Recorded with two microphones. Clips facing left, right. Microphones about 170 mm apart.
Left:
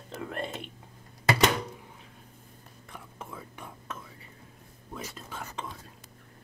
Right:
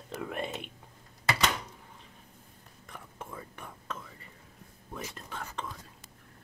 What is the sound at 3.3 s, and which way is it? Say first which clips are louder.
Whispering: left 1 dB; 5° left (ahead or behind).